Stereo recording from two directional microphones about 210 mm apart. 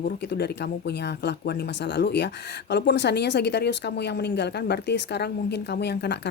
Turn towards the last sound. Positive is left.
turn(degrees=50)  # may be behind; listen again after turning